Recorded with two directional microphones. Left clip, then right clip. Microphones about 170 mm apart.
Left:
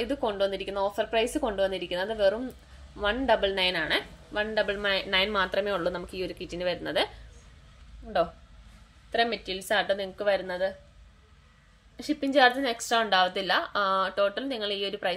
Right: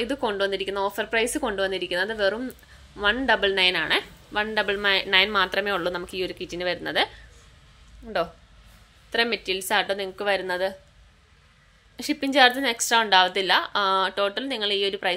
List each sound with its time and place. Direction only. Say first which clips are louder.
0.0 s a woman's voice: right 2 dB; 10° right (ahead or behind)
8.0 s a woman's voice: even; 15° right (ahead or behind)
12.0 s a woman's voice: right 3 dB; 10° right (ahead or behind)